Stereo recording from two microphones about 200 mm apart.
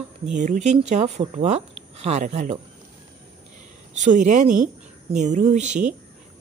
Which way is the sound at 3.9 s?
35° right (ahead or behind).